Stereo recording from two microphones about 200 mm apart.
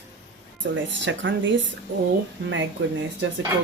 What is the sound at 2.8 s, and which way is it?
Speech, 65° right (ahead or behind).